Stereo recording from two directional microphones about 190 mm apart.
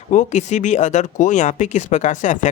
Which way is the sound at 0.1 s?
40° left (ahead or behind).